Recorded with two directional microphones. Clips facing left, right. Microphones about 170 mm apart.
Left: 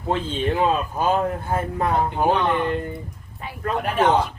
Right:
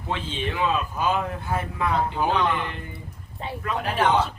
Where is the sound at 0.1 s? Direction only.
45° left (ahead or behind).